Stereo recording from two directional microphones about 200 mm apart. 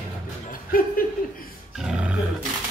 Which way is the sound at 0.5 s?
45° left (ahead or behind).